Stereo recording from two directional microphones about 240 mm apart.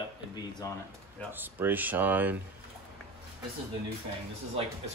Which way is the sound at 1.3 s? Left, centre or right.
Centre.